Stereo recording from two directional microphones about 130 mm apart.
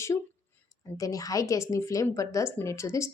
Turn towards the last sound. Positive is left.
turn(degrees=25)  # may be behind; listen again after turning